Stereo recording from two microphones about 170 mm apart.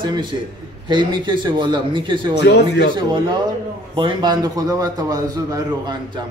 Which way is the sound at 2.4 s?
80° left.